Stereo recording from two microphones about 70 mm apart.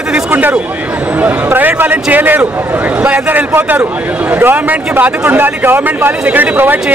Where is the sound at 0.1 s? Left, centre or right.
Right.